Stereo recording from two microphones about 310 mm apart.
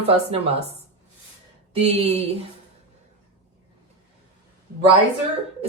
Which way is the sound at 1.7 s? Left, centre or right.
Centre.